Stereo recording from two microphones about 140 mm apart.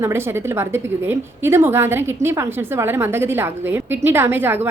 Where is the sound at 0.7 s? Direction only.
20° right (ahead or behind).